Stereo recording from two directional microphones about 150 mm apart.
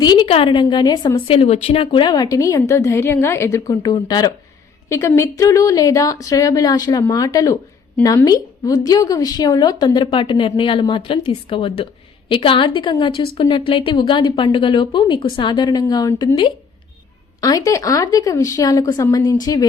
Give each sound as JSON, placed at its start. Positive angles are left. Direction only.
{"t": 0.0, "sound": "a woman's voice", "side_deg": 30}
{"t": 1.3, "sound": "a woman's voice", "side_deg": 45}